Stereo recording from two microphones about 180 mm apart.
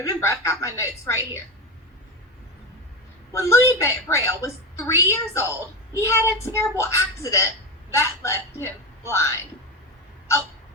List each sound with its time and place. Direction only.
0.0 s a woman's voice: 15° left (ahead or behind)
3.3 s a woman's voice: 15° left (ahead or behind)